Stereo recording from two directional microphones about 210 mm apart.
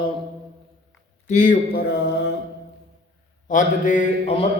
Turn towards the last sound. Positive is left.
turn(degrees=30)  # may be behind; listen again after turning